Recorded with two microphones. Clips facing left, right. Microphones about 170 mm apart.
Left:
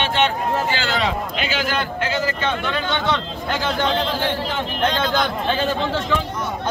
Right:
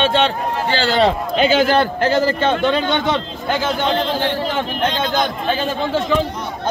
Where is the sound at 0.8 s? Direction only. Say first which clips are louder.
Right 6 dB; 35° right (ahead or behind).